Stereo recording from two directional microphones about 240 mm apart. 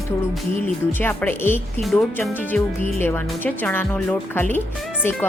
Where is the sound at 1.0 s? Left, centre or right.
Centre.